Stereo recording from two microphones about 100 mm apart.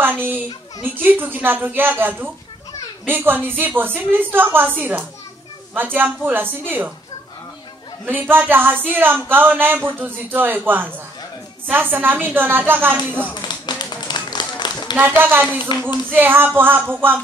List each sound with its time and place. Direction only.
0.0 s a child's voice: 20° right (ahead or behind)
8.1 s speech: 20° right (ahead or behind)
13.3 s a sound: 45° left (ahead or behind)
15.0 s speech: 20° right (ahead or behind)